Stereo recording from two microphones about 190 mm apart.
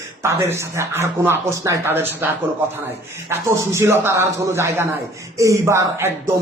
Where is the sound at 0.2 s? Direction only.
15° right (ahead or behind).